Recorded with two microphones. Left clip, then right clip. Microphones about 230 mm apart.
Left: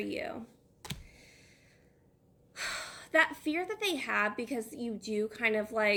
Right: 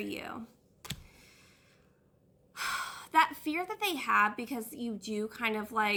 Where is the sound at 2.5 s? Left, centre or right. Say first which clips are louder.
Right 3 dB; centre.